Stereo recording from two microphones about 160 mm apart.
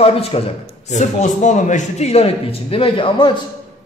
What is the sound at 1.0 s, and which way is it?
A man's voice, 50° left (ahead or behind).